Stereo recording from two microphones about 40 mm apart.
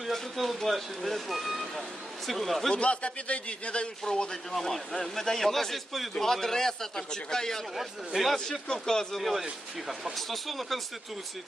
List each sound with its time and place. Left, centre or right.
0.1 s speech: centre
2.7 s a man's voice: left
4.0 s a man's voice: centre
7.8 s speech: centre
8.6 s a man's voice: centre
9.1 s speech: centre